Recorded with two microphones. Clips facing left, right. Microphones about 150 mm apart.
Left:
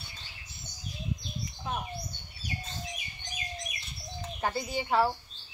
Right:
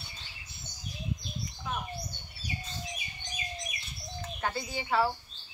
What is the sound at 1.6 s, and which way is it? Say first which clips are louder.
Bird: left 2 dB; 25° left (ahead or behind).